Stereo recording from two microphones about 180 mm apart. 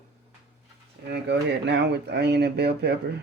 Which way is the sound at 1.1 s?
70° right (ahead or behind).